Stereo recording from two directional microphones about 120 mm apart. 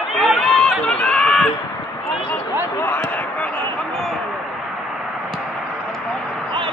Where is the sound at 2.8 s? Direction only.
20° left (ahead or behind).